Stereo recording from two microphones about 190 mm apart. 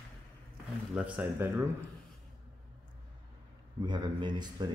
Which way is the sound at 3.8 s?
25° right (ahead or behind).